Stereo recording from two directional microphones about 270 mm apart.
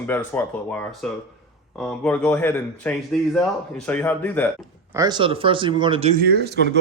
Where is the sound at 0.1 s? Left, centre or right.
Centre.